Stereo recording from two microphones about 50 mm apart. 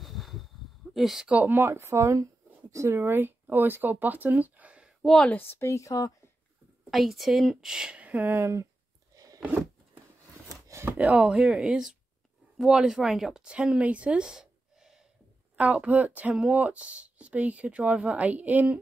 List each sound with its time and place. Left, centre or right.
0.0 s a sound: centre
0.9 s speech: centre
1.2 s speech: right
1.5 s speech: right
1.8 s speech: right
5.0 s a woman's voice: centre
5.3 s a woman's voice: left
5.7 s speech: left
6.9 s a woman's voice: centre
8.2 s speech: right
10.7 s chopping: right
11.1 s speech: centre
15.5 s speech: right
18.1 s a woman's voice: right